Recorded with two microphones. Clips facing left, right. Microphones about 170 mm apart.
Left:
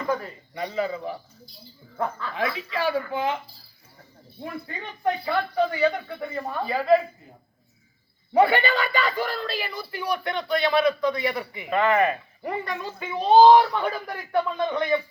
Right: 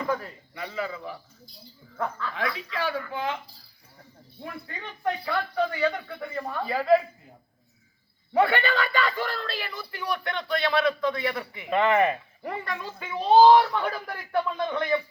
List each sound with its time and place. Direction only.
0.1 s a man's voice: 20° left (ahead or behind)
2.0 s speech: 10° left (ahead or behind)
2.4 s speech: 25° left (ahead or behind)
2.7 s speech: 10° left (ahead or behind)
4.6 s speech: 10° left (ahead or behind)
8.4 s speech: centre (ahead or behind)
11.7 s speech: 20° right (ahead or behind)
12.4 s speech: 5° left (ahead or behind)